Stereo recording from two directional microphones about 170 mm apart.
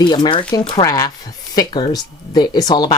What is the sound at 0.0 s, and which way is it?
Speech, 25° left (ahead or behind).